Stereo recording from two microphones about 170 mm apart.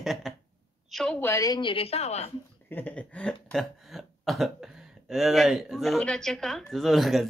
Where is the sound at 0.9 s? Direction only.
5° left (ahead or behind).